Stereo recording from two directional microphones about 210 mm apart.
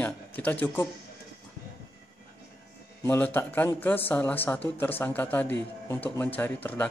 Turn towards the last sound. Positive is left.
turn(degrees=5)  # may be behind; listen again after turning